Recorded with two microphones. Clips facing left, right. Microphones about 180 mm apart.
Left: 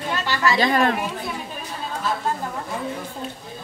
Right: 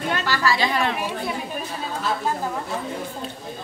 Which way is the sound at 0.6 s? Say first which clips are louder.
Left 4 dB; 45° left (ahead or behind).